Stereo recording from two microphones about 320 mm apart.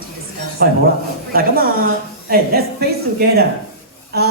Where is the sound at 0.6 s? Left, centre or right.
Right.